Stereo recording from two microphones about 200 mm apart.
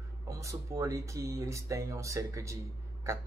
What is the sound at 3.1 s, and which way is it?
Burping, 15° right (ahead or behind).